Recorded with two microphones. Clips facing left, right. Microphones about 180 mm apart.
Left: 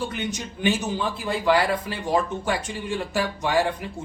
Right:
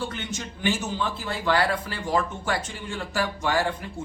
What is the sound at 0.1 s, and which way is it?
Speech, 15° left (ahead or behind).